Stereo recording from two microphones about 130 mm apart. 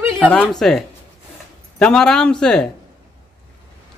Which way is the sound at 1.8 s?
5° left (ahead or behind).